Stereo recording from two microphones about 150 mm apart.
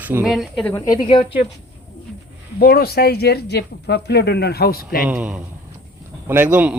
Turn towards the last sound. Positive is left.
turn(degrees=-10)  # may be behind; listen again after turning